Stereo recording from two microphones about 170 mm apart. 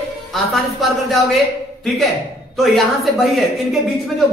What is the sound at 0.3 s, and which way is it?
A man's voice, centre (ahead or behind).